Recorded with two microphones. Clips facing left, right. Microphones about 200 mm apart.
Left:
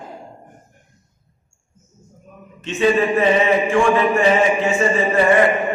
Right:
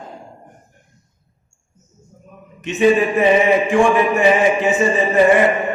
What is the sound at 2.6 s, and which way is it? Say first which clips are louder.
Mantra: right 3 dB; 15° right (ahead or behind).